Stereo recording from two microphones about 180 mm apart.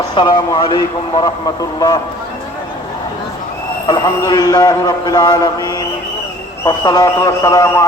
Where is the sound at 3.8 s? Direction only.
20° left (ahead or behind).